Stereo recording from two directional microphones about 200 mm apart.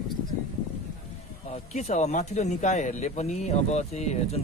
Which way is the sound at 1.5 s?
35° left (ahead or behind).